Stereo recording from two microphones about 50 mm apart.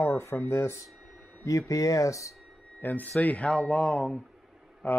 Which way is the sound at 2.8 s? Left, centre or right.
Left.